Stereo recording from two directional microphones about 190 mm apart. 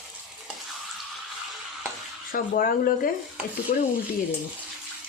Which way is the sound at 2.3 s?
50° left (ahead or behind).